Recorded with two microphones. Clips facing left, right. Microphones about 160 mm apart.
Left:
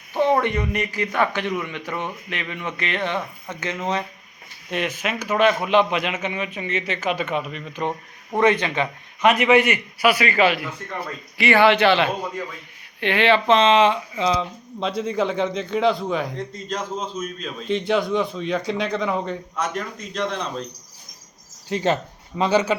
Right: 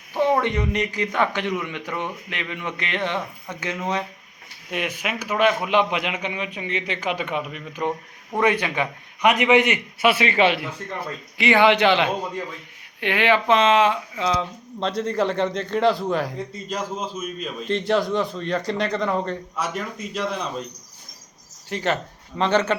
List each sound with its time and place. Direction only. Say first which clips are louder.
0.1 s a sound: left 1 dB; 15° left (ahead or behind)
0.4 s a man's voice: even; 20° right (ahead or behind)
21.7 s speech: left 3 dB; 20° left (ahead or behind)
22.4 s speech: left 1 dB; 10° left (ahead or behind)